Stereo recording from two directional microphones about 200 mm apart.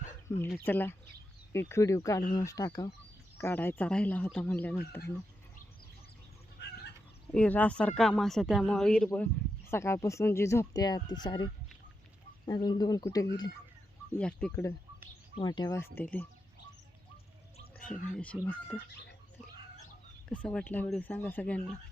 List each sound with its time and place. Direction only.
0.4 s speech: 10° left (ahead or behind)
6.6 s chicken: 55° left (ahead or behind)
7.3 s speech: 5° left (ahead or behind)
14.2 s speech: 5° left (ahead or behind)
15.4 s speech: 20° left (ahead or behind)
17.8 s speech: 5° left (ahead or behind)
20.3 s speech: 5° left (ahead or behind)